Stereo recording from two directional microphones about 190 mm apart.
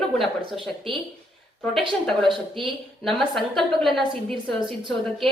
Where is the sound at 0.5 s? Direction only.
25° right (ahead or behind).